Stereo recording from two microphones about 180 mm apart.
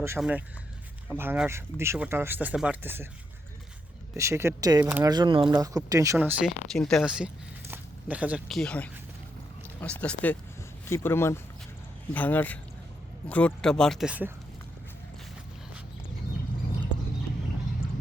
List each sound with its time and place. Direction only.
0.2 s speech: 5° right (ahead or behind)
4.2 s speech: 15° right (ahead or behind)
6.7 s speech: centre (ahead or behind)